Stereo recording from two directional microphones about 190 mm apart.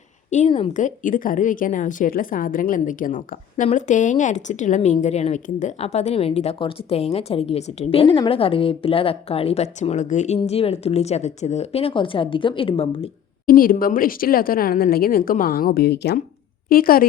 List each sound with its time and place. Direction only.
0.3 s a woman's voice: 35° left (ahead or behind)
13.5 s speech: 50° left (ahead or behind)